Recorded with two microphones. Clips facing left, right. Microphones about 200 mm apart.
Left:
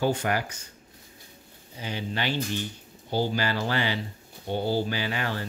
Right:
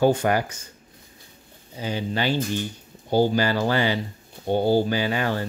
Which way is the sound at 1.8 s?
35° right (ahead or behind).